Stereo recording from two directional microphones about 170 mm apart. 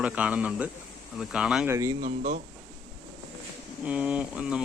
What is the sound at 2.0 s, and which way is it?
Speech, 55° right (ahead or behind).